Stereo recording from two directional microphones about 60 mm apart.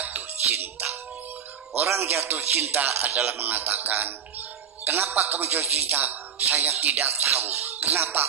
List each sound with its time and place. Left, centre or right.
0.0 s music: right
1.7 s speech: right